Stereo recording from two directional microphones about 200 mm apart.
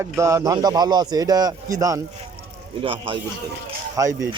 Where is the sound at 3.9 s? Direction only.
15° right (ahead or behind).